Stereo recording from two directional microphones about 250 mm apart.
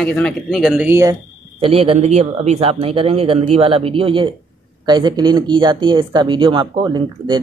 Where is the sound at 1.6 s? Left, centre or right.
Right.